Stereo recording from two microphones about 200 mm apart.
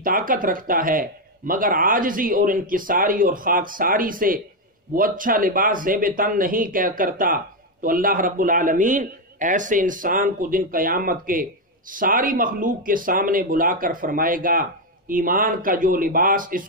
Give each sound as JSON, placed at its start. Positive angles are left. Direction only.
{"t": 0.0, "sound": "speech", "side_deg": -45}